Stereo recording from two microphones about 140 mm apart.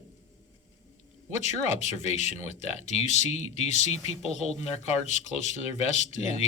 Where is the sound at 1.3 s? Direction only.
55° left (ahead or behind).